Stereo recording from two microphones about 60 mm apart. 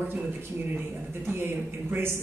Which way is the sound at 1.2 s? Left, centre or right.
Right.